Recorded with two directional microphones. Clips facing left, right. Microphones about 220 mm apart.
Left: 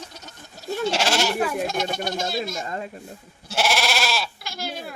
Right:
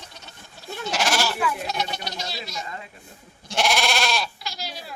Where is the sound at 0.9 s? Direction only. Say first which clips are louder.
Left 1 dB; 30° left (ahead or behind).